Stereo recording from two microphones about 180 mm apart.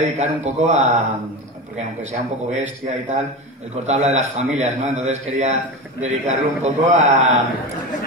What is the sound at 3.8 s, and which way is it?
A man's voice, 40° right (ahead or behind).